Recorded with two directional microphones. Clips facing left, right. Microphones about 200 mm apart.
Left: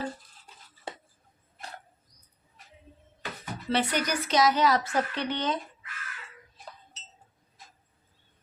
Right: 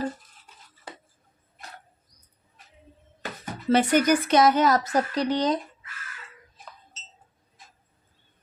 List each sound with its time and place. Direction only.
3.4 s speech: 45° right (ahead or behind)